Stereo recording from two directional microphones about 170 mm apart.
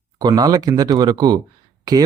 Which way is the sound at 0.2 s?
25° right (ahead or behind).